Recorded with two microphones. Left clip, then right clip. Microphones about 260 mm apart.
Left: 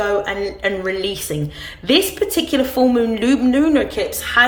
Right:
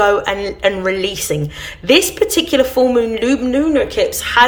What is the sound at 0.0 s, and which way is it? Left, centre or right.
Speech, centre.